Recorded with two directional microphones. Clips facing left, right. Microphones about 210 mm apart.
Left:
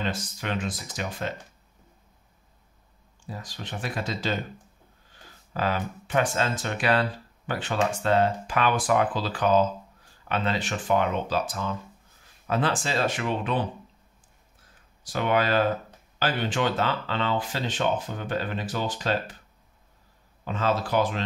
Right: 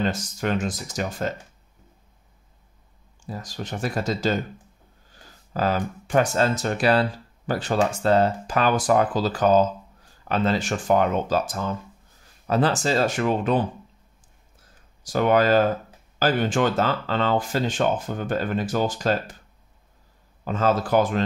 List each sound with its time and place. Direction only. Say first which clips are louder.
0.0 s speech: right 6 dB; 45° right (ahead or behind)
3.3 s speech: right 5 dB; 45° right (ahead or behind)
5.5 s speech: right 4 dB; 40° right (ahead or behind)
15.0 s speech: right 6 dB; 45° right (ahead or behind)
20.4 s speech: right 4 dB; 45° right (ahead or behind)